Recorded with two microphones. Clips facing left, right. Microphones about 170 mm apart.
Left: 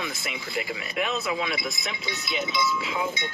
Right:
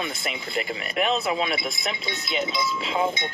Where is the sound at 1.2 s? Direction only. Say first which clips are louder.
Right 3 dB; 25° right (ahead or behind).